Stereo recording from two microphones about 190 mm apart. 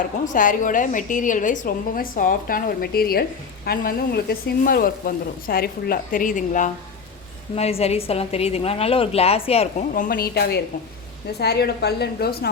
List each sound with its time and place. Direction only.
0.3 s a woman's voice: 45° left (ahead or behind)
9.9 s a woman's voice: 50° left (ahead or behind)